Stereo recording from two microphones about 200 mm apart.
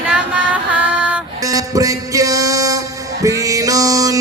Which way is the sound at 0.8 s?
5° right (ahead or behind).